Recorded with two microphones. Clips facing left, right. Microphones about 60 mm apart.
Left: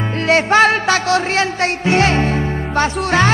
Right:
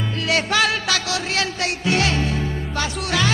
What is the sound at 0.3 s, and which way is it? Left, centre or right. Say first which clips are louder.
Music: left 8 dB; left.